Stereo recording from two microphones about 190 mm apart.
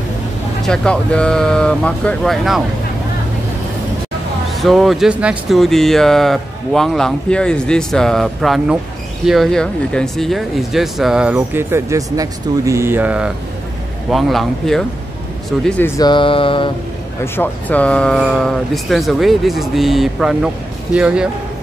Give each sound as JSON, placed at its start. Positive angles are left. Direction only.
{"t": 0.7, "sound": "speech", "side_deg": 5}
{"t": 4.6, "sound": "speech", "side_deg": 0}
{"t": 11.3, "sound": "speech", "side_deg": -15}
{"t": 16.0, "sound": "music", "side_deg": 25}
{"t": 17.2, "sound": "speech", "side_deg": 10}